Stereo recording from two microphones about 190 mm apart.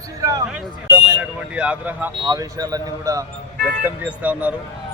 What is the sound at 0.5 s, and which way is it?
Speech, 5° right (ahead or behind).